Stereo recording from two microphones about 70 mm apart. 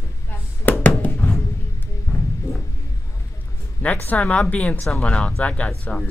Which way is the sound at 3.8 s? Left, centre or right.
Centre.